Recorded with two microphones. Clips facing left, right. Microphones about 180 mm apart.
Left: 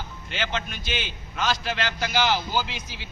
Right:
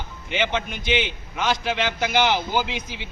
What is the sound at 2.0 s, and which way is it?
Speech, 15° right (ahead or behind).